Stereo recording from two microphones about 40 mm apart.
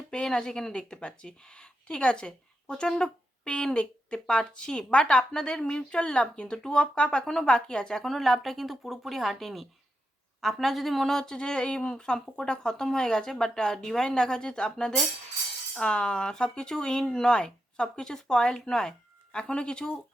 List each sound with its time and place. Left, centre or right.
0.1 s speech: centre
8.0 s speech: centre
19.3 s speech: left